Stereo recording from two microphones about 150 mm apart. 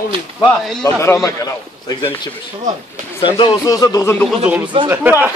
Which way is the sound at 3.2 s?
35° left (ahead or behind).